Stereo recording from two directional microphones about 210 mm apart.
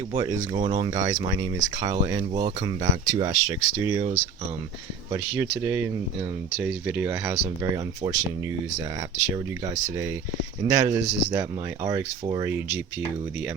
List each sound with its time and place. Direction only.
0.1 s speech: 25° right (ahead or behind)
12.2 s speech: 25° right (ahead or behind)
12.5 s speech: 10° right (ahead or behind)